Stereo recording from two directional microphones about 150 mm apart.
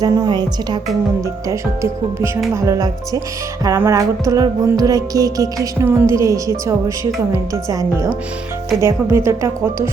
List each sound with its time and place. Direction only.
0.0 s music: 25° right (ahead or behind)
1.5 s speech: 20° right (ahead or behind)
2.6 s music: 20° right (ahead or behind)